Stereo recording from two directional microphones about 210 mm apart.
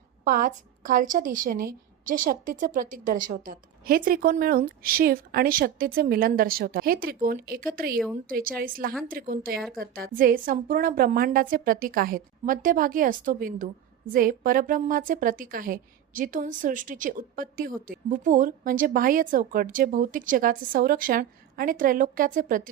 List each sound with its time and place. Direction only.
0.3 s a woman's voice: 40° right (ahead or behind)